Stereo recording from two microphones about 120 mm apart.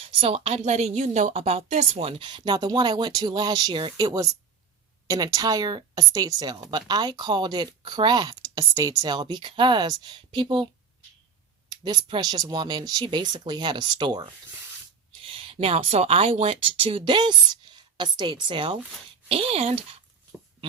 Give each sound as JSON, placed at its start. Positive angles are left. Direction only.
{"t": 0.2, "sound": "a woman's voice", "side_deg": -55}
{"t": 11.7, "sound": "speech", "side_deg": -40}
{"t": 15.2, "sound": "a sound", "side_deg": -45}
{"t": 15.5, "sound": "a woman's voice", "side_deg": -60}
{"t": 19.3, "sound": "speech", "side_deg": -55}